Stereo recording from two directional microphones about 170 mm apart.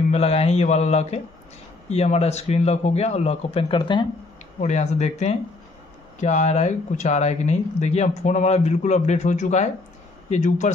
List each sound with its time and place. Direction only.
0.1 s speech: 35° left (ahead or behind)
4.6 s speech: 40° left (ahead or behind)